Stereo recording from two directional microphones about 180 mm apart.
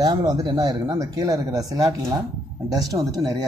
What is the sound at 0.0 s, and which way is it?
Speech, 20° right (ahead or behind).